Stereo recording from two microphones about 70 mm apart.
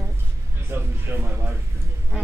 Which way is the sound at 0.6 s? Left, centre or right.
Right.